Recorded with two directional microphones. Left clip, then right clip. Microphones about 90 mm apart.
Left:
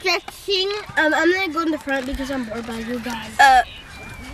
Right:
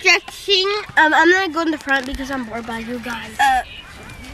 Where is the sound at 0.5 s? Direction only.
20° right (ahead or behind).